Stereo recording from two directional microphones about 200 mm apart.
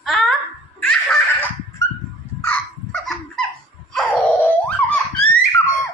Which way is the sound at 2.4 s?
5° left (ahead or behind).